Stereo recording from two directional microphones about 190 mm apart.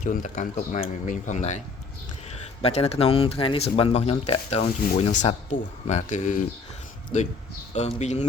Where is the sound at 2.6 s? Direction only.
35° left (ahead or behind).